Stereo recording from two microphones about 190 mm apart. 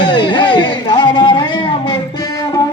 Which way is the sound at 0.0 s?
25° left (ahead or behind).